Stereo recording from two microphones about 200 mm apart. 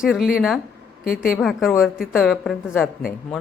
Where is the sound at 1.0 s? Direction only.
45° left (ahead or behind).